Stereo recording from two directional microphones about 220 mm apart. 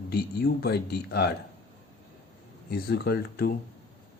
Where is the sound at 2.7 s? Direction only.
45° left (ahead or behind).